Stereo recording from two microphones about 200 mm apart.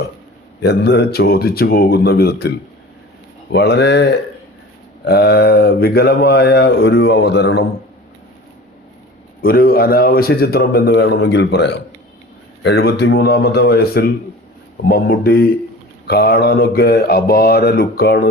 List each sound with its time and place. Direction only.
0.6 s speech: 55° left (ahead or behind)
3.5 s speech: 55° left (ahead or behind)
9.4 s speech: 45° left (ahead or behind)